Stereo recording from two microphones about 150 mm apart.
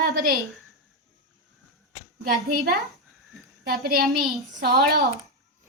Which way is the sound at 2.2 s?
75° right (ahead or behind).